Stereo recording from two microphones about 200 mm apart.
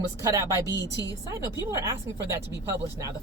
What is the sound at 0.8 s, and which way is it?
Speech, 15° left (ahead or behind).